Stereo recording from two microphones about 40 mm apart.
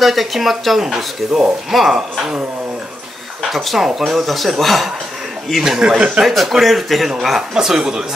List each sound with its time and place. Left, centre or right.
0.0 s speech: centre
2.0 s speech: centre
3.5 s speech: centre
5.8 s speech: right
6.2 s speech: centre
7.5 s speech: centre